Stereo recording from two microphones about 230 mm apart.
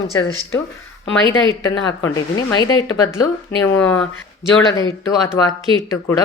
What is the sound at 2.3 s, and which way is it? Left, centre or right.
Speech, centre.